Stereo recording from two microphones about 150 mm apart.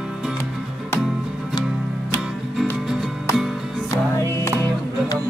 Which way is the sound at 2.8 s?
5° right (ahead or behind).